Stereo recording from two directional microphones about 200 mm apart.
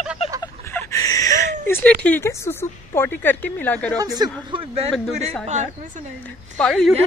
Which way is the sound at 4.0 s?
20° right (ahead or behind).